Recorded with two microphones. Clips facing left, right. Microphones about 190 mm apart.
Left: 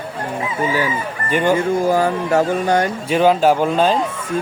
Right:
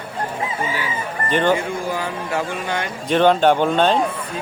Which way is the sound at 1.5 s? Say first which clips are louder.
Left 6 dB; 45° left (ahead or behind).